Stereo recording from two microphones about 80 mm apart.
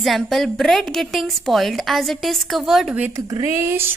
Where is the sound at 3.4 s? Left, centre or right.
Right.